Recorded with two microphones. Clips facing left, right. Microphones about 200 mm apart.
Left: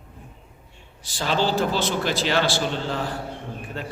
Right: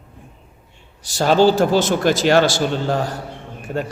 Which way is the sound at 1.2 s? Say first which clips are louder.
Right 9 dB; 45° right (ahead or behind).